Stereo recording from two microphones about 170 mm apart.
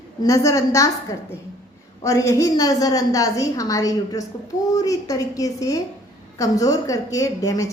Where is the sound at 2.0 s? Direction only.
20° left (ahead or behind).